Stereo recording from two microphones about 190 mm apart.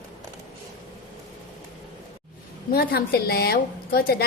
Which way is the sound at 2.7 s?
55° left (ahead or behind).